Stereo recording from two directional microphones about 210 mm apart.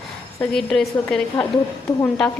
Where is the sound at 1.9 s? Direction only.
15° left (ahead or behind).